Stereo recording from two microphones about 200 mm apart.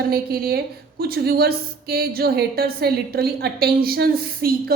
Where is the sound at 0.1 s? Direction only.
50° right (ahead or behind).